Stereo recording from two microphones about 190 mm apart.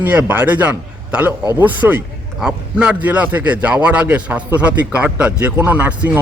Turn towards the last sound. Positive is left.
turn(degrees=-10)  # may be behind; listen again after turning